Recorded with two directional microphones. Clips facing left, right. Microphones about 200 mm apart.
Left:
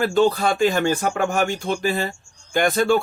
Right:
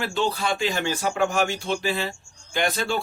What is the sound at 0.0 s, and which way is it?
Speech, 45° left (ahead or behind).